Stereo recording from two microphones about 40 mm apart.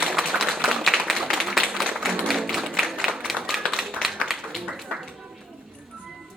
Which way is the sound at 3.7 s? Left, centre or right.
Centre.